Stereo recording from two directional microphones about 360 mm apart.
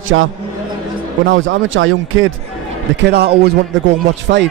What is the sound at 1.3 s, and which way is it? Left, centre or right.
A man's voice, right.